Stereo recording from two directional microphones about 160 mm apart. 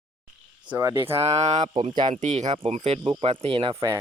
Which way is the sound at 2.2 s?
45° right (ahead or behind).